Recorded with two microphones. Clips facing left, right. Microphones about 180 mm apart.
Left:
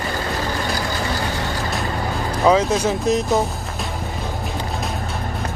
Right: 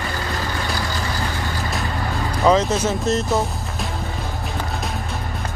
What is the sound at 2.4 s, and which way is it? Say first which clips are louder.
Speech: left 1 dB; 5° left (ahead or behind).